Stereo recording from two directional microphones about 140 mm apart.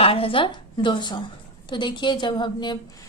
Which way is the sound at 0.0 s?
40° left (ahead or behind).